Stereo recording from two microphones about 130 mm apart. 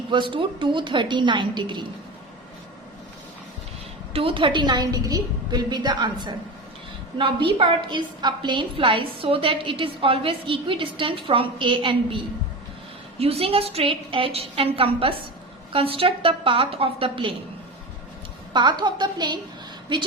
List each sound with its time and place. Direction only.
0.1 s a woman's voice: 40° right (ahead or behind)
4.1 s a woman's voice: 45° right (ahead or behind)
18.5 s a woman's voice: 35° right (ahead or behind)